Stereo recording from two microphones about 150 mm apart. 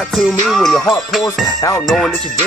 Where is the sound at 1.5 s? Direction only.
30° left (ahead or behind).